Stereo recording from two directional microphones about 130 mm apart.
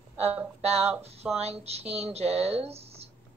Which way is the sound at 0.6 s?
50° right (ahead or behind).